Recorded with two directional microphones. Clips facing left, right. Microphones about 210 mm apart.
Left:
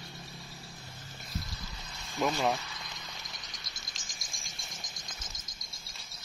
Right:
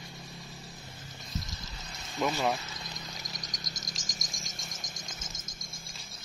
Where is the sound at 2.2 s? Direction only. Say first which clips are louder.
Even; centre (ahead or behind).